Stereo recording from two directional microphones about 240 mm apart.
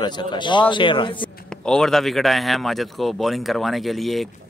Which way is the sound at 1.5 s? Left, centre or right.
Centre.